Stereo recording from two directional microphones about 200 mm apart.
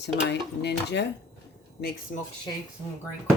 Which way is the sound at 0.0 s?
60° left (ahead or behind).